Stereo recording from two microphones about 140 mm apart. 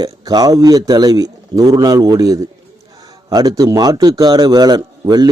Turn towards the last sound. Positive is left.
turn(degrees=-30)  # may be behind; listen again after turning